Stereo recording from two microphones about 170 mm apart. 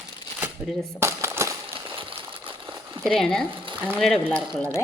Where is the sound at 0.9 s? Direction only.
15° right (ahead or behind).